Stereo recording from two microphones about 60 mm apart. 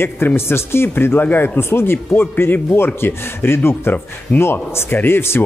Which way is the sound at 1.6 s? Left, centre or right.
Left.